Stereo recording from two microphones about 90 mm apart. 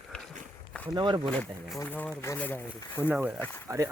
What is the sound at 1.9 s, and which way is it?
Speech, 25° left (ahead or behind).